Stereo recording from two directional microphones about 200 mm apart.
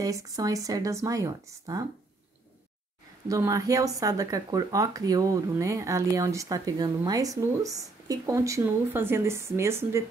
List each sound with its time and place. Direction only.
0.0 s speech: 15° right (ahead or behind)
3.3 s speech: 15° right (ahead or behind)